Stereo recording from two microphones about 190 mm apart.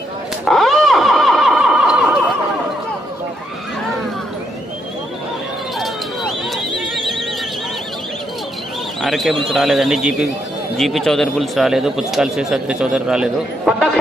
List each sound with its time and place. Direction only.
0.4 s snicker: centre (ahead or behind)
5.8 s a sound: centre (ahead or behind)
9.0 s speech: centre (ahead or behind)